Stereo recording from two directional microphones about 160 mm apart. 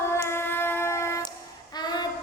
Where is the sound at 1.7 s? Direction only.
25° left (ahead or behind).